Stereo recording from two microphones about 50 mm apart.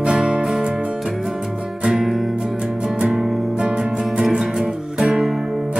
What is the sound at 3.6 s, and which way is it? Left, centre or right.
Music, centre.